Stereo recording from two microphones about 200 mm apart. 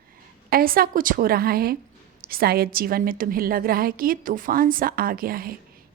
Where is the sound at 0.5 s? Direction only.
45° right (ahead or behind).